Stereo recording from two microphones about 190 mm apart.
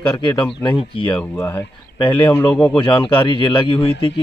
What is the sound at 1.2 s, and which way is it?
Speech, 10° left (ahead or behind).